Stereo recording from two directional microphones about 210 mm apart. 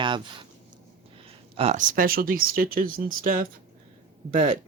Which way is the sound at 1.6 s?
35° right (ahead or behind).